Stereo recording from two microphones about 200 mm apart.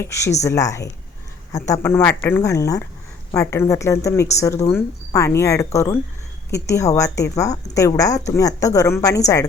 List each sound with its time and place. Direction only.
0.0 s a woman's voice: 15° left (ahead or behind)